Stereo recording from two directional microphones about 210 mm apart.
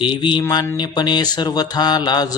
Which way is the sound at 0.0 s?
25° left (ahead or behind).